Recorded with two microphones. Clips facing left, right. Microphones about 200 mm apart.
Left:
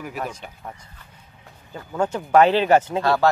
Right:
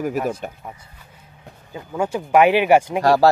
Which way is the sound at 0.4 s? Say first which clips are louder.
Right 9 dB; 50° right (ahead or behind).